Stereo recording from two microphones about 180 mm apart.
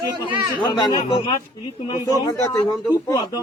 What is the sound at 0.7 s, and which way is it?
A man's voice, 25° left (ahead or behind).